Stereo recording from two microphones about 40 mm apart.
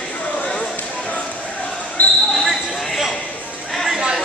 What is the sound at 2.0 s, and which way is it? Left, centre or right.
Basketball bounce, left.